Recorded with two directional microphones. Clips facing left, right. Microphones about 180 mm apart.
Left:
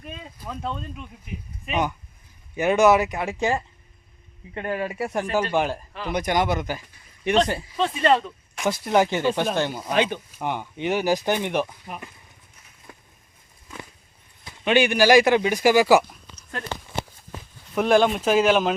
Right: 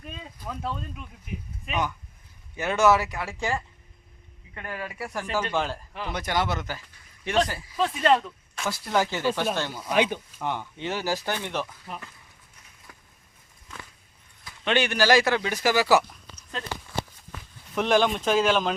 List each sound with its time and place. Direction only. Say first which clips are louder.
0.4 s speech: left 2 dB; centre (ahead or behind)
1.7 s speech: left 4 dB; 20° left (ahead or behind)
7.8 s speech: left 1 dB; centre (ahead or behind)
8.2 s speech: left 6 dB; 15° left (ahead or behind)
9.9 s speech: even; 10° right (ahead or behind)
10.3 s speech: left 2 dB; 15° left (ahead or behind)
12.9 s a sound: left 6 dB; 20° left (ahead or behind)
14.6 s speech: left 5 dB; 10° left (ahead or behind)
17.7 s speech: left 4 dB; 5° left (ahead or behind)